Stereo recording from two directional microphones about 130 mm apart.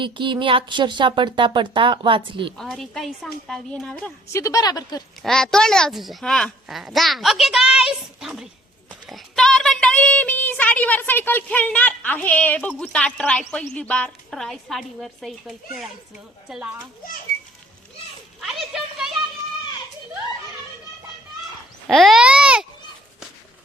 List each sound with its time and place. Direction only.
0.0 s speech: 40° right (ahead or behind)
2.6 s a woman's voice: centre (ahead or behind)
4.3 s speech: 25° left (ahead or behind)
5.2 s a child's voice: 5° left (ahead or behind)
18.3 s a sound: centre (ahead or behind)
21.8 s speech: centre (ahead or behind)